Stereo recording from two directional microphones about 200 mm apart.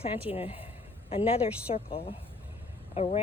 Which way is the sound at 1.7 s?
30° left (ahead or behind).